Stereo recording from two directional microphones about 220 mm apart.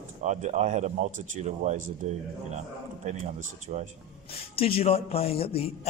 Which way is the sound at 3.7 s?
35° right (ahead or behind).